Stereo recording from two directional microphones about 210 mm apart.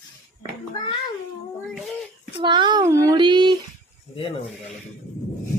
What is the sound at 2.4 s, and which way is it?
Speech, 20° right (ahead or behind).